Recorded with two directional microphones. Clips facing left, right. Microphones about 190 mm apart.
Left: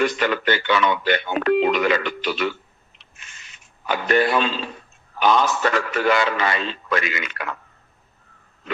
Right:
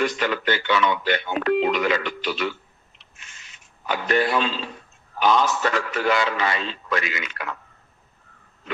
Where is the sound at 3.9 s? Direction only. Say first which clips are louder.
Left 3 dB; 60° left (ahead or behind).